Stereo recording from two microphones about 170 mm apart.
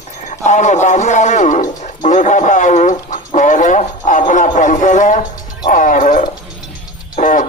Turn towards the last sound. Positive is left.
turn(degrees=50)  # may be behind; listen again after turning